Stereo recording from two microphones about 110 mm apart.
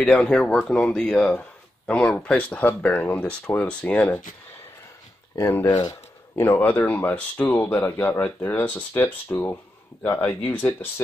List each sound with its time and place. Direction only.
0.0 s speech: 10° left (ahead or behind)
5.4 s speech: 20° left (ahead or behind)